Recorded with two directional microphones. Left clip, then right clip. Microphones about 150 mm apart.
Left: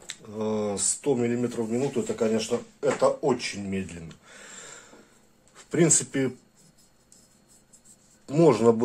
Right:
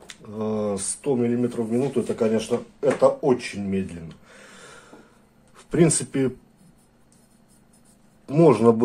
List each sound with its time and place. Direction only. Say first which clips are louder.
0.1 s speech: right 1 dB; 10° left (ahead or behind)
2.0 s speech: right 3 dB; 5° left (ahead or behind)
4.7 s a sound: right 2 dB; centre (ahead or behind)
5.6 s speech: right 2 dB; centre (ahead or behind)
8.3 s speech: right 3 dB; centre (ahead or behind)